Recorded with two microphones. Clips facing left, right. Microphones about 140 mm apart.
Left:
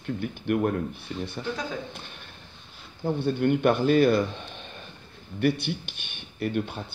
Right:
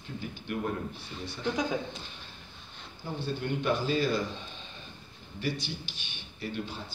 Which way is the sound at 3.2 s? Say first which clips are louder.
Left 9 dB; 55° left (ahead or behind).